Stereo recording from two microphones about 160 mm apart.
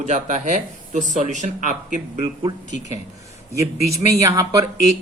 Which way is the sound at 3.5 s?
20° right (ahead or behind).